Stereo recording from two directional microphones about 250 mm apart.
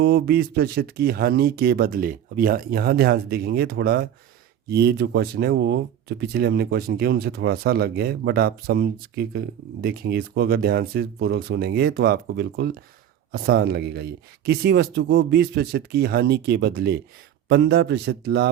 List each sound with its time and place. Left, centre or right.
0.0 s speech: right